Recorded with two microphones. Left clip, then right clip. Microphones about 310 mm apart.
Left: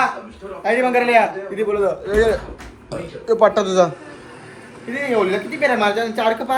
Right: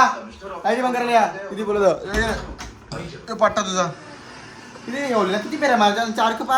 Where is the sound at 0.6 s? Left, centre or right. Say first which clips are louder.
Left 4 dB; centre.